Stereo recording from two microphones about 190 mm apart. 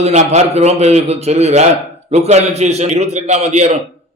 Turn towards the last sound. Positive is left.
turn(degrees=-35)  # may be behind; listen again after turning